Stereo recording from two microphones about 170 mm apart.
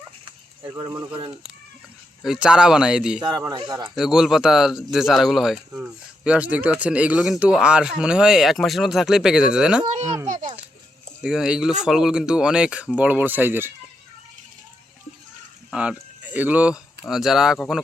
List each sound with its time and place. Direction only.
0.3 s a sound: 25° right (ahead or behind)
2.2 s speech: 5° right (ahead or behind)
3.4 s speech: 20° right (ahead or behind)
3.9 s speech: centre (ahead or behind)
10.2 s a child's voice: 45° right (ahead or behind)
11.2 s speech: 5° right (ahead or behind)
15.7 s speech: 5° right (ahead or behind)